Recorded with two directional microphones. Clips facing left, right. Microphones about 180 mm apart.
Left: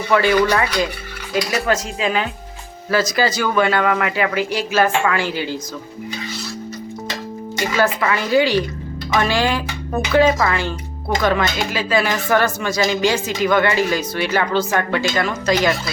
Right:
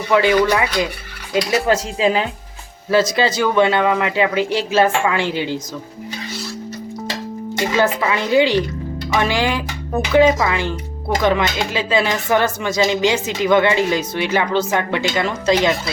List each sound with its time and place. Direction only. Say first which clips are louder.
0.1 s speech: right 1 dB; 15° right (ahead or behind)
7.8 s speech: even; 20° right (ahead or behind)